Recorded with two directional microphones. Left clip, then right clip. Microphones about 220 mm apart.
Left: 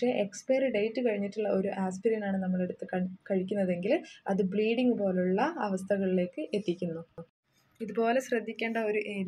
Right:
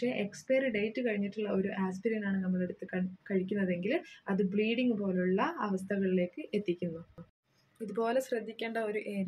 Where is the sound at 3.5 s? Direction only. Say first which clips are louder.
Left 7 dB; 20° left (ahead or behind).